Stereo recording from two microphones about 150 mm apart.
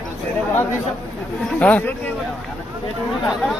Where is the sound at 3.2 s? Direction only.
Centre (ahead or behind).